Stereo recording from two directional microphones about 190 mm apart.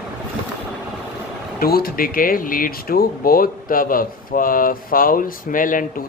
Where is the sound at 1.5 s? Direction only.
55° left (ahead or behind).